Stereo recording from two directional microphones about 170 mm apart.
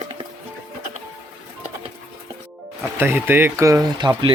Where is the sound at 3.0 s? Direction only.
10° right (ahead or behind).